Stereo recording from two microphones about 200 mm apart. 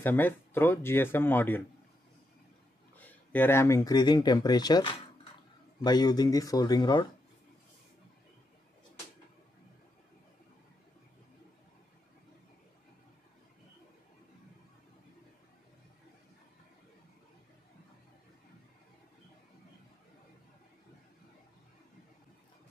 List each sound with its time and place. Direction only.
0.0 s speech: 10° left (ahead or behind)
3.0 s speech: 10° left (ahead or behind)